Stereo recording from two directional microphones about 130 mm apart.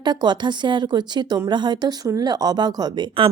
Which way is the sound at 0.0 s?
35° right (ahead or behind).